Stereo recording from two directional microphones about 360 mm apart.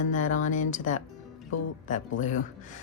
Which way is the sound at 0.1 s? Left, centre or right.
Left.